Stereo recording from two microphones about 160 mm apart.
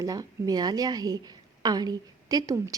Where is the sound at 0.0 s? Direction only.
20° right (ahead or behind).